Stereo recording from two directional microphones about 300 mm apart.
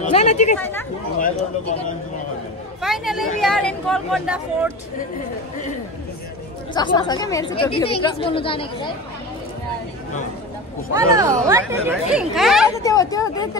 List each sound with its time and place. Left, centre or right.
0.1 s speech: left
0.6 s speech: centre
2.8 s speech: centre
6.7 s speech: centre
10.9 s speech: centre
12.8 s speech: centre